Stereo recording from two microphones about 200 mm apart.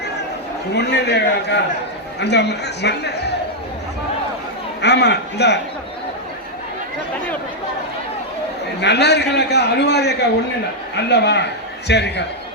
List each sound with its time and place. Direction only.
0.7 s a man's voice: 55° left (ahead or behind)
4.8 s a man's voice: 60° left (ahead or behind)
8.8 s a man's voice: 55° left (ahead or behind)